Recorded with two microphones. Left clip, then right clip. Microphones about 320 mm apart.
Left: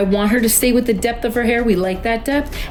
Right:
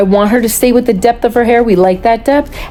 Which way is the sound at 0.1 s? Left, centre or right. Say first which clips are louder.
Right 7 dB; centre.